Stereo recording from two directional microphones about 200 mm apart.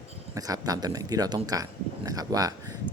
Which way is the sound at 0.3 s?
20° right (ahead or behind).